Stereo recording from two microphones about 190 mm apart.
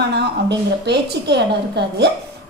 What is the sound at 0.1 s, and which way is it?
A woman's voice, 65° right (ahead or behind).